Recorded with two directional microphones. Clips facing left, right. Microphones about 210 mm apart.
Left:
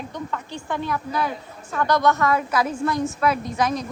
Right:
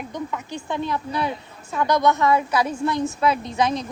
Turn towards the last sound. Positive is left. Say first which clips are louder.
# right 1 dB
turn(degrees=-25)  # may be behind; listen again after turning